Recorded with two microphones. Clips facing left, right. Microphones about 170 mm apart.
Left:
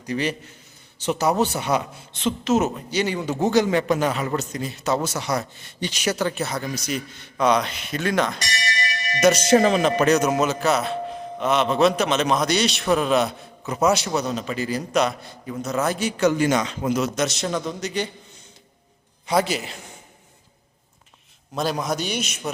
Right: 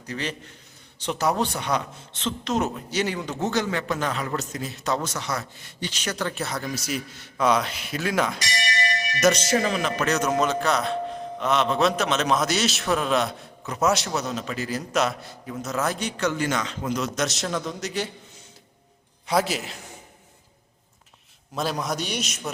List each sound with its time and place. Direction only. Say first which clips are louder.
0.0 s a man's voice: left 6 dB; 10° left (ahead or behind)
3.3 s a man's voice: left 8 dB; 15° left (ahead or behind); by 8.4 s 5° right (ahead or behind)
9.7 s speech: left 6 dB; 25° left (ahead or behind)
10.1 s a man's voice: left 4 dB; 10° left (ahead or behind)
19.3 s a man's voice: left 2 dB; centre (ahead or behind)
21.5 s a man's voice: left 3 dB; centre (ahead or behind)